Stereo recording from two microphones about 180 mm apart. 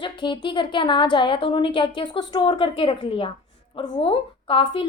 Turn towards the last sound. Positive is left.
turn(degrees=25)  # may be behind; listen again after turning